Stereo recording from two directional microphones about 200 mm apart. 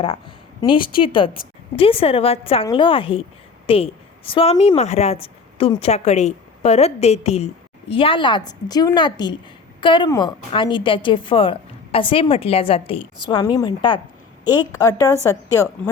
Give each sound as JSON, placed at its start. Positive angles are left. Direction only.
{"t": 0.0, "sound": "a woman's voice", "side_deg": 25}